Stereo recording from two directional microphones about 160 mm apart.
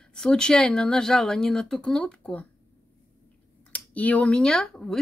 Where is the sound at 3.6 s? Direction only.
10° left (ahead or behind).